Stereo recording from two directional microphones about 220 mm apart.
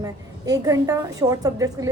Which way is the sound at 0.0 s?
15° right (ahead or behind).